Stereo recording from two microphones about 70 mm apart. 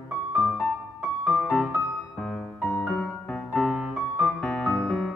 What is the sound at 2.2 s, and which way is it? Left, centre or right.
Music, centre.